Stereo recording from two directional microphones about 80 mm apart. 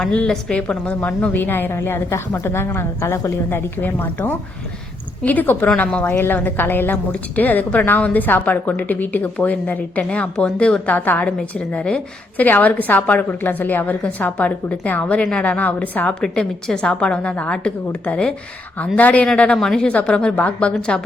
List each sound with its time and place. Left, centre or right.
0.0 s a woman's voice: centre; by 3.6 s left
3.8 s a woman's voice: left
16.2 s a woman's voice: centre